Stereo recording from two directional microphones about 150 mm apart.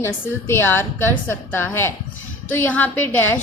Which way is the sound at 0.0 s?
15° left (ahead or behind).